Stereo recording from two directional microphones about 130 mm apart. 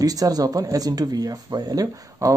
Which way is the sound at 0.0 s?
30° right (ahead or behind).